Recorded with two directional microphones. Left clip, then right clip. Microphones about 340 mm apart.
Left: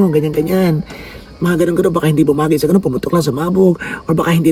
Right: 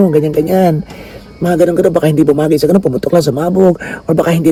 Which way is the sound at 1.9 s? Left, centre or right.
Centre.